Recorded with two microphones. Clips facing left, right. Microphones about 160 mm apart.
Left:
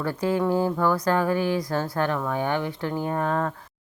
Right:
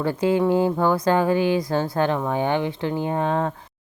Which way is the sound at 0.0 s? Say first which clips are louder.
Right 4 dB; 25° right (ahead or behind).